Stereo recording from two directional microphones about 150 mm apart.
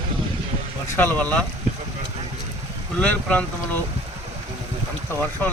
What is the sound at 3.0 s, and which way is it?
Speech, 5° left (ahead or behind).